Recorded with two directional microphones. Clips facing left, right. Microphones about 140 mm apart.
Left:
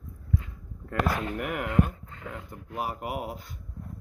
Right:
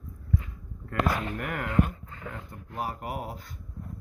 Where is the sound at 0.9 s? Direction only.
20° left (ahead or behind).